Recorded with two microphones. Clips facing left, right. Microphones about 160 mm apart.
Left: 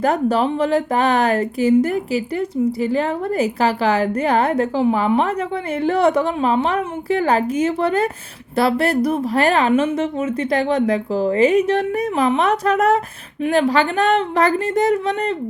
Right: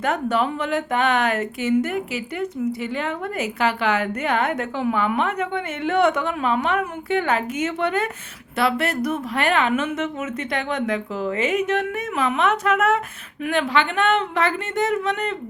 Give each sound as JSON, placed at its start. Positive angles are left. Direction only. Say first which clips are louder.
{"t": 0.0, "sound": "speech", "louder": "left 5 dB", "side_deg": 35}